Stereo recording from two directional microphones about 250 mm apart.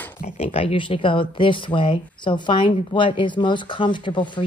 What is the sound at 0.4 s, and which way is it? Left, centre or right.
A woman's voice, left.